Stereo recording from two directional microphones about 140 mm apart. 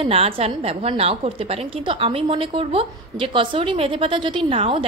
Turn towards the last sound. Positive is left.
turn(degrees=-40)  # may be behind; listen again after turning